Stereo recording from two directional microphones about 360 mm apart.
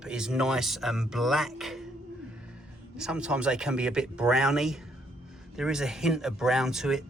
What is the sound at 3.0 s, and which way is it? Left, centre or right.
Speech, centre.